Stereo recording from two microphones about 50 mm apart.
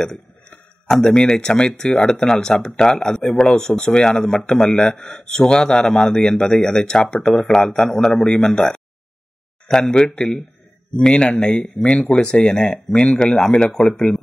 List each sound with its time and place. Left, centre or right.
0.8 s a man's voice: centre
12.6 s speech: centre